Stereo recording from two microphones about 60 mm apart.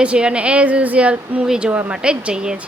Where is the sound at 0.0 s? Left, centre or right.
Centre.